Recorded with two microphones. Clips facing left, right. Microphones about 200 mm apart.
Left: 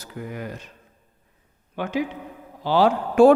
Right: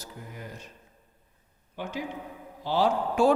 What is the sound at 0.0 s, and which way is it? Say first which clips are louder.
Speech: left 9 dB; 75° left (ahead or behind).